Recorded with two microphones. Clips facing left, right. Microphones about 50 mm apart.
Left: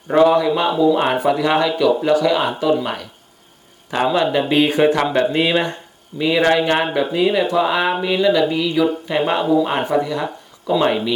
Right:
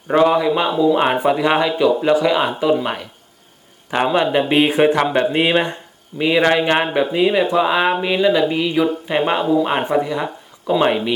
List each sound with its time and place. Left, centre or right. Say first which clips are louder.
0.1 s a man's voice: left 1 dB; right